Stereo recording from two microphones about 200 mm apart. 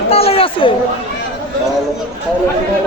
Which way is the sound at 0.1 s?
30° left (ahead or behind).